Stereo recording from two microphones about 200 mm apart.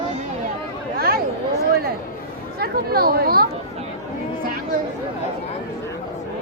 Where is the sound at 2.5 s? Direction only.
50° right (ahead or behind).